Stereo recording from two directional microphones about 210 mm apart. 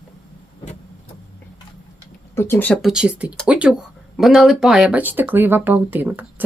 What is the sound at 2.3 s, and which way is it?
Speech, 10° left (ahead or behind).